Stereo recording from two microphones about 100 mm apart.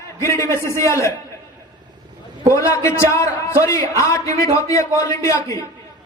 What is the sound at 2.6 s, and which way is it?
A man's voice, 30° left (ahead or behind).